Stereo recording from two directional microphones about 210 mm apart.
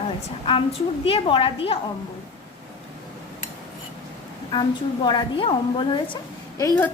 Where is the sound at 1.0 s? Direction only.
25° left (ahead or behind).